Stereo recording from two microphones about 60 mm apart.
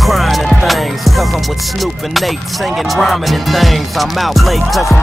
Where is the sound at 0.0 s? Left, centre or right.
Centre.